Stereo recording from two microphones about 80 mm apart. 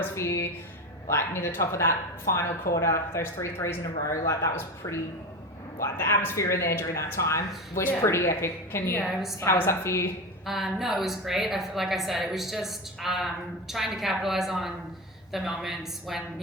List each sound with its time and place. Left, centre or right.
0.0 s speech: left
9.0 s a woman's voice: centre
9.4 s speech: left
10.4 s a woman's voice: centre